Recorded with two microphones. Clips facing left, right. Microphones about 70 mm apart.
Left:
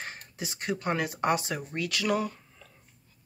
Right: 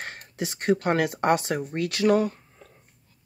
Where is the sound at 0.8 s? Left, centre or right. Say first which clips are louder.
Right 5 dB; right.